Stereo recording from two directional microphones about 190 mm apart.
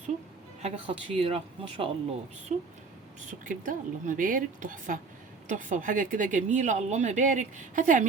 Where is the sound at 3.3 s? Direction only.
45° right (ahead or behind).